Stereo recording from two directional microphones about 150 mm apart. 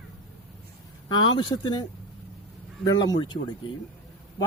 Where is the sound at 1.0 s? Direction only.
30° left (ahead or behind).